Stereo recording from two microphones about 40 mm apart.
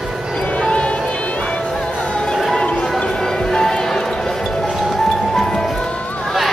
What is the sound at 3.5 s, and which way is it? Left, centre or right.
Music, centre.